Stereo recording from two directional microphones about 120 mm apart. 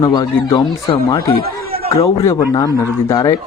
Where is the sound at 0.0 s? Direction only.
35° left (ahead or behind).